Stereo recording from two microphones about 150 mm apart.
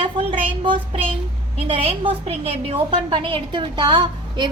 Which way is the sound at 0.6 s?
35° right (ahead or behind).